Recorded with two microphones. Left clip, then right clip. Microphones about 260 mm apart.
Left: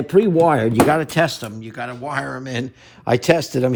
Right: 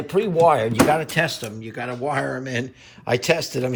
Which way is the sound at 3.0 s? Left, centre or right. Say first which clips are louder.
Left 4 dB; left.